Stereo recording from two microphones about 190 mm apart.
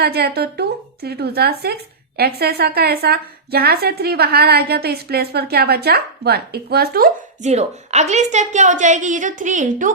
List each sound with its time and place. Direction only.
0.0 s a woman's voice: 55° right (ahead or behind)
7.4 s a woman's voice: 35° right (ahead or behind)